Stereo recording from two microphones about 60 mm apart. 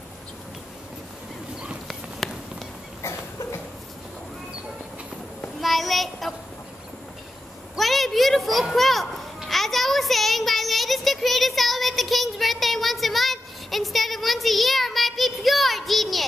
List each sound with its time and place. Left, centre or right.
1.9 s walk: centre
3.0 s a sound: left
5.6 s child singing: centre
7.7 s children playing: centre